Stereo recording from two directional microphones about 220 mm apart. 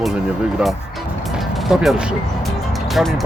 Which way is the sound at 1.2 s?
Centre (ahead or behind).